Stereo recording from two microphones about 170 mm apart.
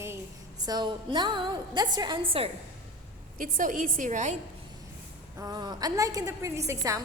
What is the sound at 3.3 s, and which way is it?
A woman's voice, 50° right (ahead or behind).